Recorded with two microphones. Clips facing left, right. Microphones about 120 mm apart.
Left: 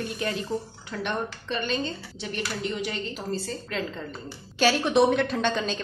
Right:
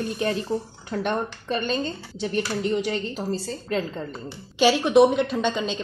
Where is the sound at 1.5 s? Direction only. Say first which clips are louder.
Right 3 dB; 40° right (ahead or behind).